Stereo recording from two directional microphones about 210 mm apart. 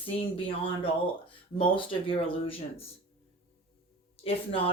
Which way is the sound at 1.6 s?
25° left (ahead or behind).